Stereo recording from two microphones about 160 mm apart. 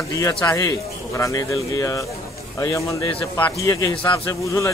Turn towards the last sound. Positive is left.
turn(degrees=20)  # may be behind; listen again after turning